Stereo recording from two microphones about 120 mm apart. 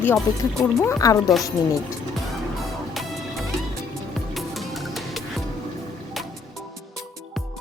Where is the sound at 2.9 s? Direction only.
Centre (ahead or behind).